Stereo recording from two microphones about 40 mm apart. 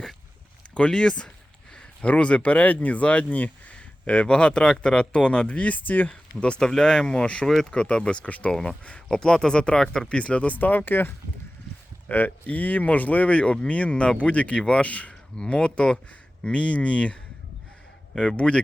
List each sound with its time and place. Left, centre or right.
0.9 s speech: centre; by 6.1 s left
6.1 s speech: left
7.4 s speech: centre
7.7 s speech: left
8.4 s speech: centre; by 11.1 s left
12.1 s speech: left
18.3 s speech: left